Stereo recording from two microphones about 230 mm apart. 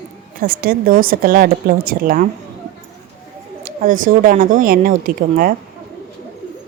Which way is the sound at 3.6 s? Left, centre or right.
Right.